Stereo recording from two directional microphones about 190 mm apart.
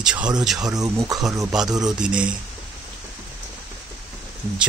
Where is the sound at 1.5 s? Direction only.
5° right (ahead or behind).